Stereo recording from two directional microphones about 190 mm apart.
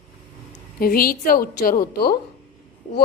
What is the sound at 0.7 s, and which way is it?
A woman's voice, 50° left (ahead or behind).